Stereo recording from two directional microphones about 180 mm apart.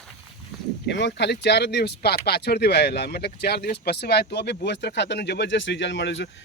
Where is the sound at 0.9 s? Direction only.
75° left (ahead or behind).